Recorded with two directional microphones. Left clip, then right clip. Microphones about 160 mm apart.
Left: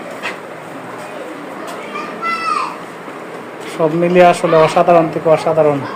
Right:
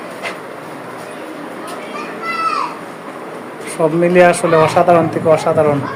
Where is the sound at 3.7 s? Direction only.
Centre (ahead or behind).